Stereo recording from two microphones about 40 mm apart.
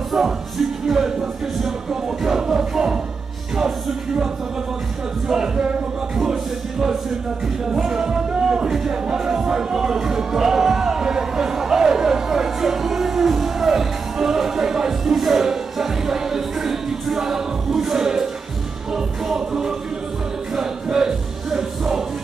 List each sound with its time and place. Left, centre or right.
0.8 s speech: centre
1.6 s music: centre
5.3 s speech: centre
6.1 s music: centre